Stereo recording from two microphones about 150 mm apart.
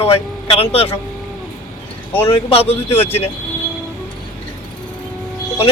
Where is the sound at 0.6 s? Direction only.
40° left (ahead or behind).